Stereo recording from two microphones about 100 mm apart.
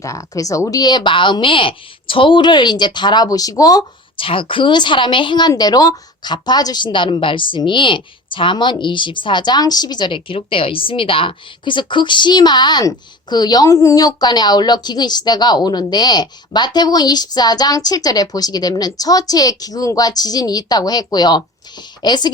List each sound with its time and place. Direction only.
0.0 s a woman's voice: 30° left (ahead or behind)
4.2 s a woman's voice: 60° left (ahead or behind); by 22.3 s 45° left (ahead or behind)